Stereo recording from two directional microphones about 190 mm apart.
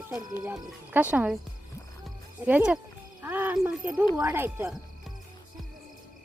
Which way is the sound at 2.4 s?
10° right (ahead or behind).